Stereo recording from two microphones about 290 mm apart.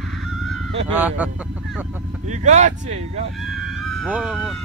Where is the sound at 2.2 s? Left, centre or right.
Right.